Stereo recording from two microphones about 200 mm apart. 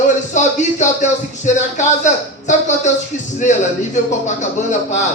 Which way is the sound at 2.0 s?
35° left (ahead or behind).